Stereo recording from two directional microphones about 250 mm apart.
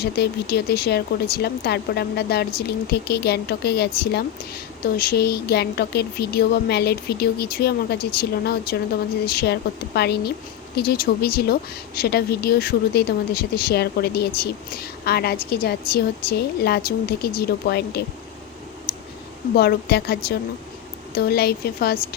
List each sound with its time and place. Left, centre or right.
0.0 s speech: left
18.9 s clicking: left
19.5 s speech: left